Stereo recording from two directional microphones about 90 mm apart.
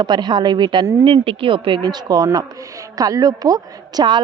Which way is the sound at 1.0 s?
85° right.